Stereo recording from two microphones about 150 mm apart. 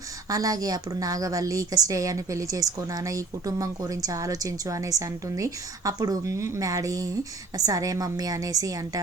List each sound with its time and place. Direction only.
0.3 s a woman's voice: 25° right (ahead or behind)